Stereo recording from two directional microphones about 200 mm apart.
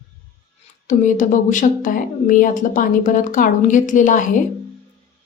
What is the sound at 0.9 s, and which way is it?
Speech, 40° left (ahead or behind).